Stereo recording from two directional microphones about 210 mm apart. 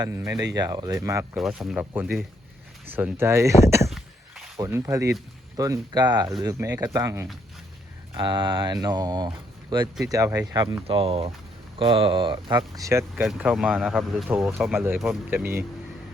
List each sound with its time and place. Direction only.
0.0 s speech: 15° right (ahead or behind)
1.4 s speech: 5° right (ahead or behind)
3.8 s a sound: centre (ahead or behind)
4.5 s speech: 15° right (ahead or behind)
13.2 s speech: centre (ahead or behind)